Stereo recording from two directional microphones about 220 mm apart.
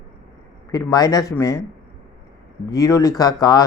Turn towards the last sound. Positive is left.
turn(degrees=15)  # may be behind; listen again after turning